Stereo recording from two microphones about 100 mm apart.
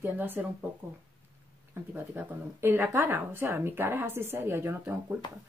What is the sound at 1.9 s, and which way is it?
Speech, 20° right (ahead or behind).